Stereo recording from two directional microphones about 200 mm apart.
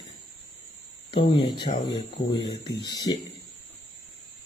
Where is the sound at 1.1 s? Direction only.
55° left (ahead or behind).